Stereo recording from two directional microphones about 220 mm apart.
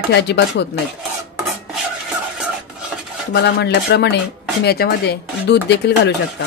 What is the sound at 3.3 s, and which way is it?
Speech, 50° left (ahead or behind).